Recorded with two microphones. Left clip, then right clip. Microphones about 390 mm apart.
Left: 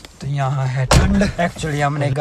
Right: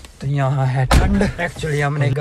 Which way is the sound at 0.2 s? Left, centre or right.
Centre.